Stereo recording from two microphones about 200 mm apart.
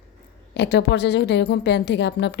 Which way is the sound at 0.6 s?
60° left (ahead or behind).